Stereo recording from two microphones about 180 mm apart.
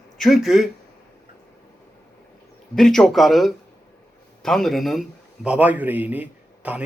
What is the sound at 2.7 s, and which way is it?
A man's voice, centre (ahead or behind).